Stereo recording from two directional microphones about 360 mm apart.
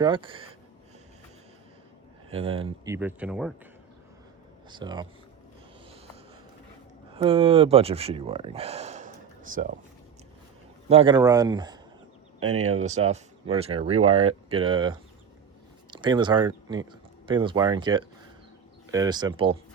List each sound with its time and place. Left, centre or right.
0.0 s speech: centre
2.3 s speech: centre
4.7 s speech: centre
7.1 s speech: centre
10.8 s speech: centre
12.5 s speech: right
12.8 s speech: centre